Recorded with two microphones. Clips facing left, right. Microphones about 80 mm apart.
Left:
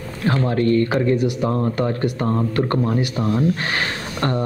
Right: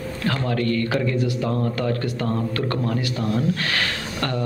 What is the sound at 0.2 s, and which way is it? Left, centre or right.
Speech, left.